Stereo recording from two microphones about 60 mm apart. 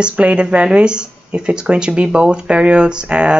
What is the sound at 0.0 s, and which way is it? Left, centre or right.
Speech, right.